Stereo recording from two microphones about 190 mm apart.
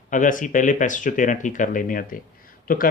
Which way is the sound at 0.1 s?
45° left (ahead or behind).